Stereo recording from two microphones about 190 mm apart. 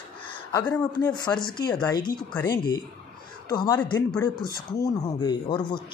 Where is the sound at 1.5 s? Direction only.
20° left (ahead or behind).